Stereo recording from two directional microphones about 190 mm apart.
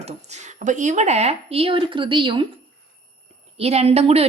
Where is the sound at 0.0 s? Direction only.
35° right (ahead or behind).